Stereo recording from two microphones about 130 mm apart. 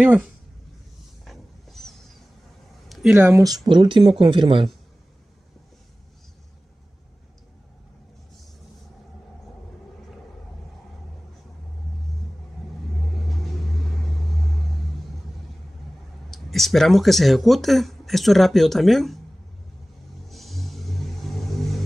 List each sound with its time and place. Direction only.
0.0 s speech: 10° right (ahead or behind)
1.2 s vehicle: centre (ahead or behind)
2.9 s a sound: 5° right (ahead or behind)
3.2 s speech: 20° right (ahead or behind); by 4.6 s 40° right (ahead or behind)
13.3 s vehicle: centre (ahead or behind)
16.3 s speech: centre (ahead or behind)
20.2 s vehicle: centre (ahead or behind)